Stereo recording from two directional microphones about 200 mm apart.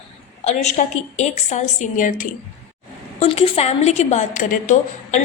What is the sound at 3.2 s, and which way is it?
A woman's voice, 30° left (ahead or behind).